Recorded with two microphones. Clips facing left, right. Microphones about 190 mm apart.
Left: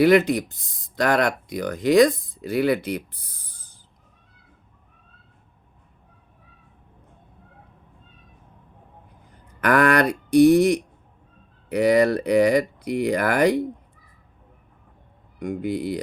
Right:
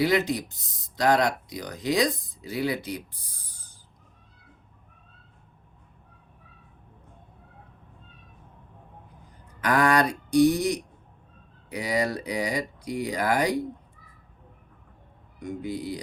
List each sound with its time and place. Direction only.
0.0 s speech: 55° left (ahead or behind)
9.6 s speech: 60° left (ahead or behind)
15.4 s speech: 60° left (ahead or behind)